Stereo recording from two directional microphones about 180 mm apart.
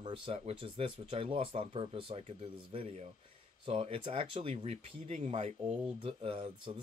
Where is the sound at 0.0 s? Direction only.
25° right (ahead or behind).